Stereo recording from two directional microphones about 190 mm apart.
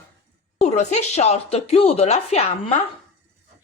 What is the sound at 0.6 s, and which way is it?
A woman's voice, 35° left (ahead or behind).